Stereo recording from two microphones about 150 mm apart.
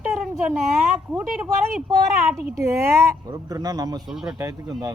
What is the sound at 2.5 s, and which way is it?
Speech, 20° right (ahead or behind).